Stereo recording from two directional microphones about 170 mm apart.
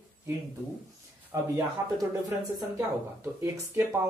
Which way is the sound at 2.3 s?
15° right (ahead or behind).